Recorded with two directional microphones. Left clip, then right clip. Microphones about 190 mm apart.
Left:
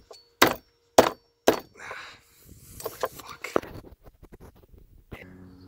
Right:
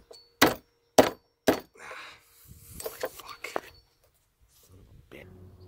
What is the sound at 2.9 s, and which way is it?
Mechanisms, 15° right (ahead or behind).